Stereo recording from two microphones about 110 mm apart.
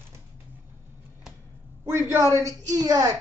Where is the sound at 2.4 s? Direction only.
30° right (ahead or behind).